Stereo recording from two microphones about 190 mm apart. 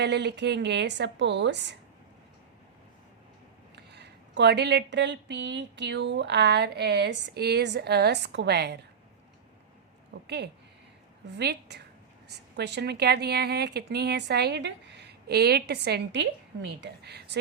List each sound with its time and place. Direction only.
0.0 s speech: 65° right (ahead or behind)
3.9 s speech: 60° right (ahead or behind)
10.2 s speech: 60° right (ahead or behind)